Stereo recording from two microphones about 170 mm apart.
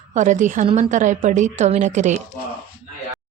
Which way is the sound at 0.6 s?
30° right (ahead or behind).